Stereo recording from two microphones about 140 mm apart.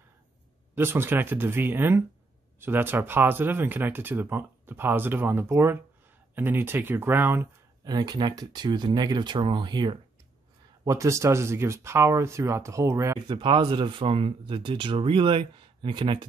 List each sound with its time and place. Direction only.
0.7 s speech: 15° right (ahead or behind)
7.8 s speech: 30° right (ahead or behind)
10.9 s speech: 20° right (ahead or behind)
13.3 s speech: 35° right (ahead or behind)